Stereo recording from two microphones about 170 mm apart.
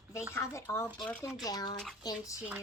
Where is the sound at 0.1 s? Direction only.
15° left (ahead or behind).